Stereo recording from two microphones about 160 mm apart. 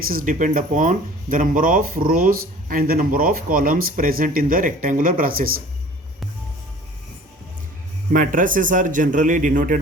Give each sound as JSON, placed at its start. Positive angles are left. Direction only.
{"t": 0.1, "sound": "speech", "side_deg": -60}
{"t": 8.1, "sound": "speech", "side_deg": -55}